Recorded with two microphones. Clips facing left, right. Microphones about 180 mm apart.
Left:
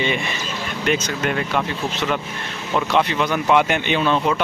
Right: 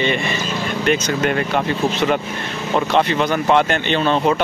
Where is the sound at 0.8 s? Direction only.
5° left (ahead or behind).